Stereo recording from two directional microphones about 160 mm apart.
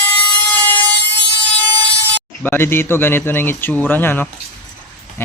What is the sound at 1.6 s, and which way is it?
Speech, 10° left (ahead or behind).